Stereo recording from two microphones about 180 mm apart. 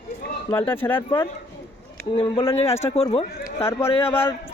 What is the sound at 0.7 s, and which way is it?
Speech, 10° left (ahead or behind).